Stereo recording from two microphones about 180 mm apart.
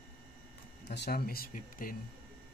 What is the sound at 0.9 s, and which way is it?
Speech, 65° left (ahead or behind).